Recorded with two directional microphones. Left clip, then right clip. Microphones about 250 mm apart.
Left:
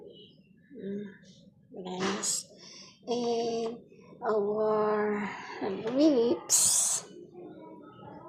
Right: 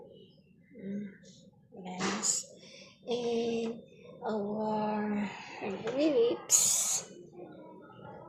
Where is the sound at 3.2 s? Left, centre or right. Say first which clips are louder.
Left 2 dB; centre.